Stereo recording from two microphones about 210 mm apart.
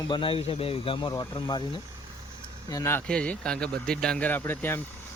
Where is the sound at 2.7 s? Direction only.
15° left (ahead or behind).